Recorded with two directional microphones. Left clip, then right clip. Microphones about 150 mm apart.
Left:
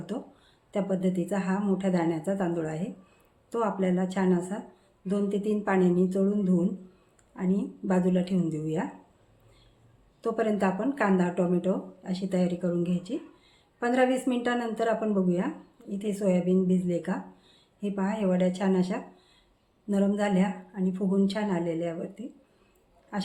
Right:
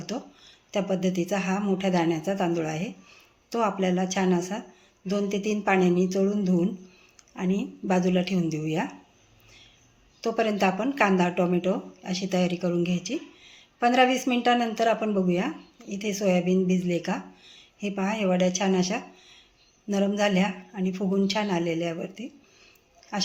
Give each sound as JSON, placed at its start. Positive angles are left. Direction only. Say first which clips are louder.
{"t": 0.1, "sound": "speech", "louder": "right 2 dB", "side_deg": -20}
{"t": 10.2, "sound": "speech", "louder": "right 3 dB", "side_deg": -15}